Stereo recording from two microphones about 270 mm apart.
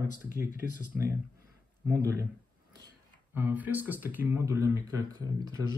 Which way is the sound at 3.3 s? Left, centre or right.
Centre.